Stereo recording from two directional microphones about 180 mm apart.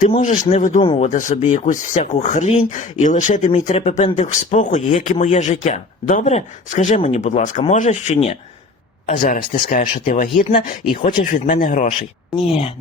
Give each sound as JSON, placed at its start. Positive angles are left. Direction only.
{"t": 0.1, "sound": "speech", "side_deg": 45}
{"t": 9.0, "sound": "speech", "side_deg": 50}
{"t": 12.5, "sound": "speech", "side_deg": 35}